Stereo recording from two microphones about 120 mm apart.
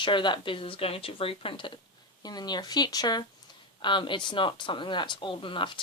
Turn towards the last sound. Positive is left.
turn(degrees=45)  # may be behind; listen again after turning